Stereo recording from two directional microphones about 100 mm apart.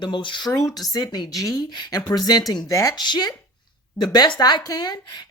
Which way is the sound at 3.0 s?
45° left (ahead or behind).